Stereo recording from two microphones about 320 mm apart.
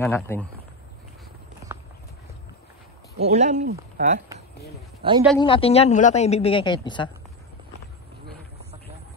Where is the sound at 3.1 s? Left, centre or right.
Right.